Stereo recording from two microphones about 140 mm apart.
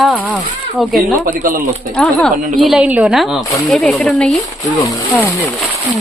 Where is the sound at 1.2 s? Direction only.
80° right.